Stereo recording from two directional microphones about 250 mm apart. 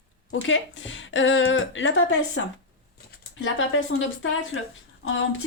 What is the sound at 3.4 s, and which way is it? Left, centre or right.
Speech, left.